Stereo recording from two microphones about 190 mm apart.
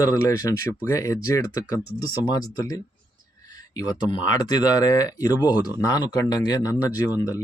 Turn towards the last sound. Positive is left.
turn(degrees=20)  # may be behind; listen again after turning